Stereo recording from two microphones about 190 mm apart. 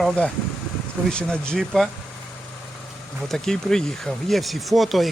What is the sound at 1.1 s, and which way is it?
Speech, 5° left (ahead or behind).